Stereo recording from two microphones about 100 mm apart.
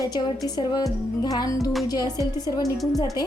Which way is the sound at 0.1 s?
40° left (ahead or behind).